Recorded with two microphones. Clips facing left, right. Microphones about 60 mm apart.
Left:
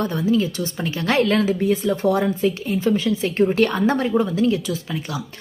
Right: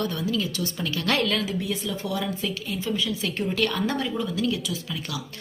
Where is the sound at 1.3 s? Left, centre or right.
Left.